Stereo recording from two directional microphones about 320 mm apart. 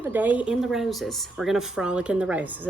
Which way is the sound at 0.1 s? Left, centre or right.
Centre.